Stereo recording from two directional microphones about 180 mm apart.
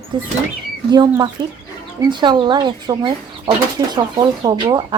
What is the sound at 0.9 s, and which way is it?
Speech, 25° right (ahead or behind).